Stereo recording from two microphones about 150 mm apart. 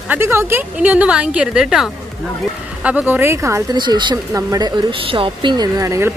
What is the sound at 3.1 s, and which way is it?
Speech, 15° right (ahead or behind).